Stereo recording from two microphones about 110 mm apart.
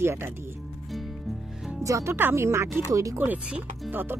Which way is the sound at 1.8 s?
25° right (ahead or behind).